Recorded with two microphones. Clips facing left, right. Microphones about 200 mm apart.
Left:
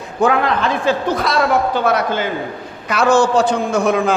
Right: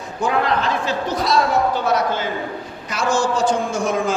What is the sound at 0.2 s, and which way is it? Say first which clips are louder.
A man's voice: left 4 dB; 55° left (ahead or behind).